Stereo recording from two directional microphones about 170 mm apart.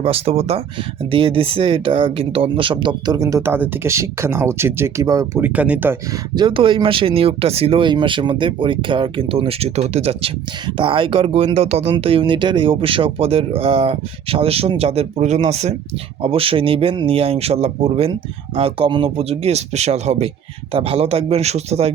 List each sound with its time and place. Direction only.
0.0 s speech: 35° right (ahead or behind); by 6.0 s 10° right (ahead or behind)
6.3 s speech: 30° right (ahead or behind)